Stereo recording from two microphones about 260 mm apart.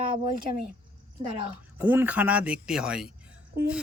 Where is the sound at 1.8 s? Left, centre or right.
Centre.